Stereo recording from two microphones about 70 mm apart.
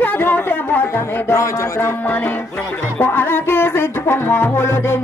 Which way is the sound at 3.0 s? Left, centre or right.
Left.